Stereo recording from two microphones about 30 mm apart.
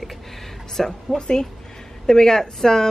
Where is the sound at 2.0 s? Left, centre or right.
Left.